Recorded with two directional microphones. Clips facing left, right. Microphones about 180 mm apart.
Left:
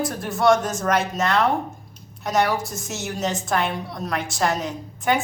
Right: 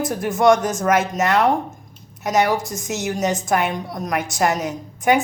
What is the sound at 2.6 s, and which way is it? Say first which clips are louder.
Speech: right 5 dB; centre (ahead or behind).